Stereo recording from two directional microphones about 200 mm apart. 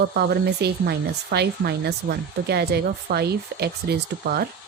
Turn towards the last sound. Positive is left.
turn(degrees=-50)  # may be behind; listen again after turning